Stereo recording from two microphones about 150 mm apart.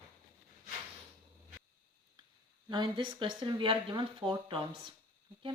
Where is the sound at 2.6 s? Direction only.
30° right (ahead or behind).